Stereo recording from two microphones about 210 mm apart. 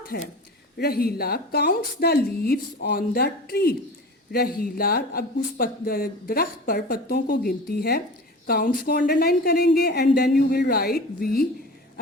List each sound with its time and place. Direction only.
0.1 s speech: 45° left (ahead or behind)